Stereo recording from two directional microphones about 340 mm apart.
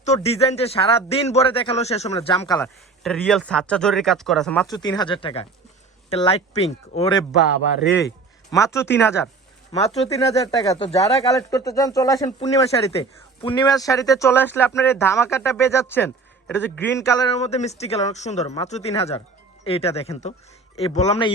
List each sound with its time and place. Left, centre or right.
0.0 s speech: centre
2.6 s speech: centre
9.7 s speech: centre